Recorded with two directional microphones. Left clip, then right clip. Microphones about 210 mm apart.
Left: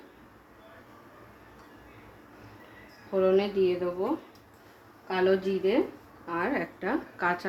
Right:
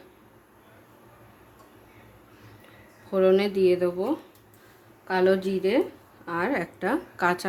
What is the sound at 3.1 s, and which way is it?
Speech, 45° right (ahead or behind).